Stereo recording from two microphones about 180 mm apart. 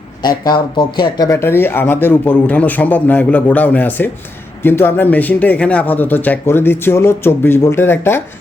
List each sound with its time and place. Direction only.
0.4 s speech: 25° left (ahead or behind)